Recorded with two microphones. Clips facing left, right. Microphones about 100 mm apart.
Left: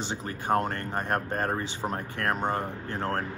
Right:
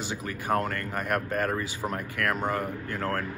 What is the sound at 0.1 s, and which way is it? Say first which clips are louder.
Speech: left 1 dB; 30° left (ahead or behind).